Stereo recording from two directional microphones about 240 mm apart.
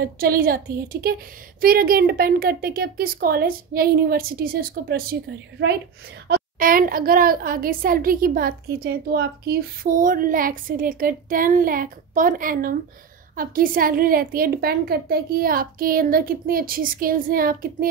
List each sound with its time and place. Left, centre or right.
0.0 s a woman's voice: right
1.6 s a woman's voice: right